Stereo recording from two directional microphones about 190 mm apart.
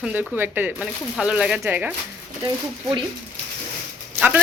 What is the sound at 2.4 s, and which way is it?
Speech, 25° right (ahead or behind).